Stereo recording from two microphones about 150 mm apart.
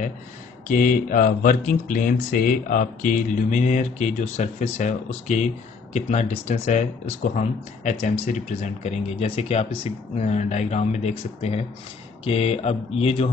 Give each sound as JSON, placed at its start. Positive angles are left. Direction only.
{"t": 0.7, "sound": "speech", "side_deg": 60}